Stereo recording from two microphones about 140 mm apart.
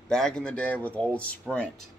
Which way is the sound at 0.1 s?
5° left (ahead or behind).